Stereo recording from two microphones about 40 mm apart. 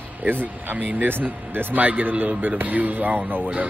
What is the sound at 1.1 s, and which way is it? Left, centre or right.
Speech, right.